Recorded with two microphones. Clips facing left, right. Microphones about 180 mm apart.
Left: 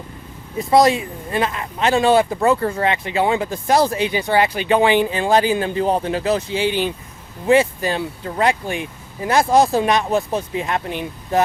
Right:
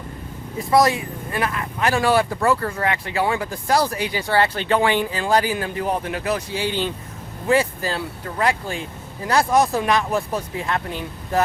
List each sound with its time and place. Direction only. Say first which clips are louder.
0.7 s speech: left 3 dB; 25° left (ahead or behind)